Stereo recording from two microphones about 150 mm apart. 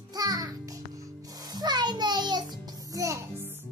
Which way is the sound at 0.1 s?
25° right (ahead or behind).